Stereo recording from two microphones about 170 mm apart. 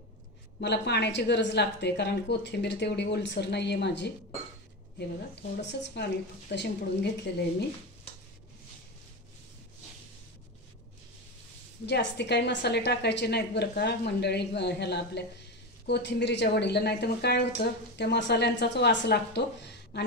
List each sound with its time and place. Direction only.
0.6 s a woman's voice: 80° left
5.6 s a woman's voice: 90° left
11.8 s a woman's voice: 90° left